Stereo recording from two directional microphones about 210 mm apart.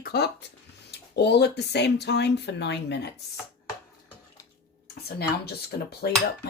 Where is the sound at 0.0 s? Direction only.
50° left (ahead or behind).